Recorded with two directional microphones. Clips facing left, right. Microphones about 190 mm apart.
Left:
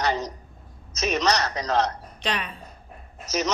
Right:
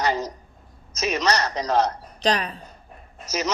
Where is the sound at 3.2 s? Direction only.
10° right (ahead or behind).